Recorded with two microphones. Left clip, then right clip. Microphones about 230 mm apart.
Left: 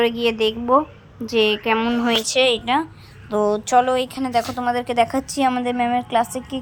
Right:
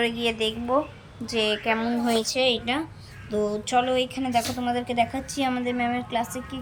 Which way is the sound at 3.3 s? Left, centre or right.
Centre.